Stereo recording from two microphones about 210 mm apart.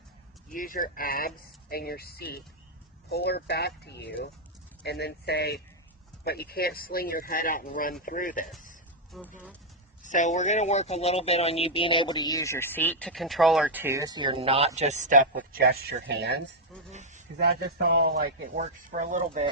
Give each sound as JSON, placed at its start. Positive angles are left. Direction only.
{"t": 0.5, "sound": "speech", "side_deg": 40}
{"t": 9.1, "sound": "speech", "side_deg": 0}
{"t": 10.0, "sound": "speech", "side_deg": 35}
{"t": 16.9, "sound": "a sound", "side_deg": -35}
{"t": 17.4, "sound": "speech", "side_deg": -45}
{"t": 18.5, "sound": "speech", "side_deg": -35}